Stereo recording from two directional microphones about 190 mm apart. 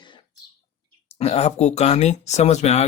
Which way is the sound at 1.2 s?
35° left (ahead or behind).